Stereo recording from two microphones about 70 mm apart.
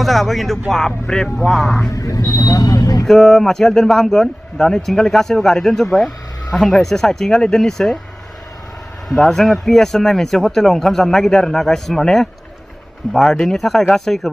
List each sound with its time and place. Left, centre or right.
0.0 s speech: centre
2.0 s speech: left
3.1 s speech: centre
9.1 s speech: centre